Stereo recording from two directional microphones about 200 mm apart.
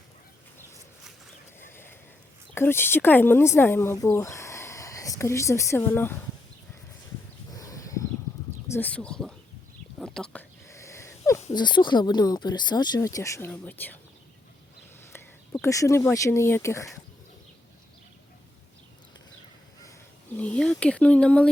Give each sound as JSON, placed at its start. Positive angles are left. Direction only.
{"t": 1.5, "sound": "a sound", "side_deg": 10}
{"t": 2.6, "sound": "speech", "side_deg": 10}
{"t": 7.5, "sound": "a sound", "side_deg": 15}
{"t": 8.6, "sound": "speech", "side_deg": 10}
{"t": 10.0, "sound": "whispering", "side_deg": 5}
{"t": 10.7, "sound": "wheeze", "side_deg": 15}
{"t": 11.5, "sound": "speech", "side_deg": 20}
{"t": 15.1, "sound": "speech", "side_deg": 15}
{"t": 20.3, "sound": "speech", "side_deg": 5}